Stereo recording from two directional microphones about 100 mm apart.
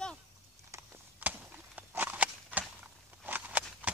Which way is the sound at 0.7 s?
30° right (ahead or behind).